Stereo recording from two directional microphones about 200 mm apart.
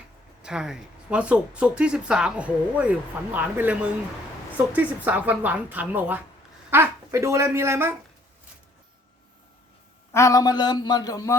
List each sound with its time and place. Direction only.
0.4 s a woman's voice: 5° right (ahead or behind)
10.1 s speech: 15° left (ahead or behind)